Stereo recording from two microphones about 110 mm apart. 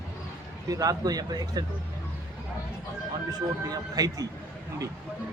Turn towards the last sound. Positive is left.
turn(degrees=-35)  # may be behind; listen again after turning